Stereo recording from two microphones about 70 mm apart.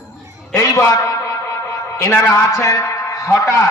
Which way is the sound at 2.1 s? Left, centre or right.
Left.